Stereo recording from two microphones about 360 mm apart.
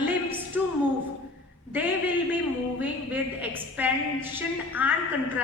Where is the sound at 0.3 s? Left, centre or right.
Centre.